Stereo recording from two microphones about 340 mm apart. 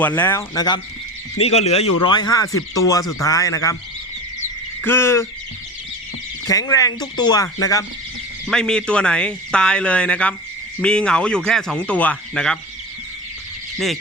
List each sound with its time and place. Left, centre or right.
0.0 s speech: centre
4.8 s speech: centre
6.5 s speech: centre
13.7 s frog: centre